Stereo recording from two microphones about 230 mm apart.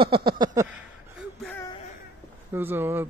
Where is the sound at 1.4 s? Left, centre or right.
Centre.